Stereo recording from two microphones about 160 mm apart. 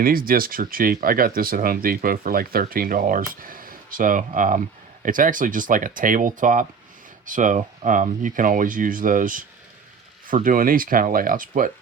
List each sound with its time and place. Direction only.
0.0 s speech: 65° right (ahead or behind)